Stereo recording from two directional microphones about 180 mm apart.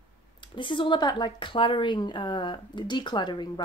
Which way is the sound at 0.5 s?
25° left (ahead or behind).